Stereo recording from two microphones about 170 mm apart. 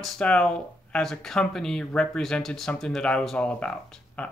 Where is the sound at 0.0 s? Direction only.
5° left (ahead or behind).